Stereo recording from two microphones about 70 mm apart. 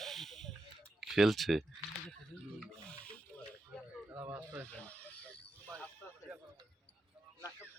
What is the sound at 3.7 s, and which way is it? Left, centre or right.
Speech, centre.